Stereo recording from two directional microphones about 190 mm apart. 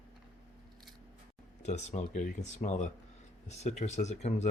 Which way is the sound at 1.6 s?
35° left (ahead or behind).